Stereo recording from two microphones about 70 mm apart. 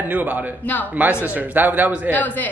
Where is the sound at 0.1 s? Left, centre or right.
Centre.